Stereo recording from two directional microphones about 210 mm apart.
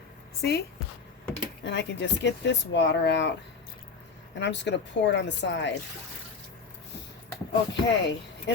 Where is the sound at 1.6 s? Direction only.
55° left (ahead or behind).